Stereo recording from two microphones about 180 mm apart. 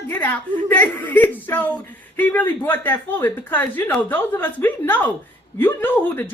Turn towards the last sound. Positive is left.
turn(degrees=10)  # may be behind; listen again after turning